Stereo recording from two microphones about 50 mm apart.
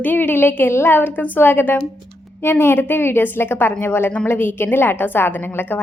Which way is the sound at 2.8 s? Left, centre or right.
Left.